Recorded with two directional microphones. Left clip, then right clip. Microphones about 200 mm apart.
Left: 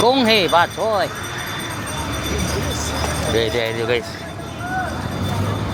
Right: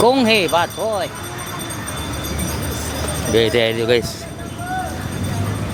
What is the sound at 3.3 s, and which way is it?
Speech, 40° right (ahead or behind).